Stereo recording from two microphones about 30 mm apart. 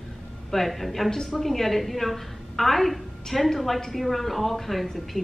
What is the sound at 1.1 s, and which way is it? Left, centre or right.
Speech, centre.